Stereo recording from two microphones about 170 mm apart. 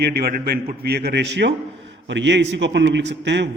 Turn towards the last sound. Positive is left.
turn(degrees=-90)